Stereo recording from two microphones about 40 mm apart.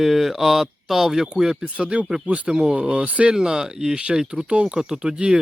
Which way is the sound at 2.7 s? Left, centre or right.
Right.